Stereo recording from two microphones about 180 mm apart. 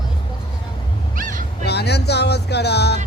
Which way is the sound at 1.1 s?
50° right (ahead or behind).